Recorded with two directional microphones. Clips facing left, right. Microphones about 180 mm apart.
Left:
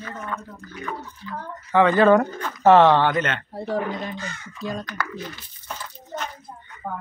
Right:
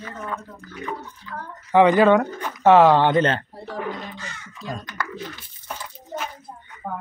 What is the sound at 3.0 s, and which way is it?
Speech, 30° right (ahead or behind).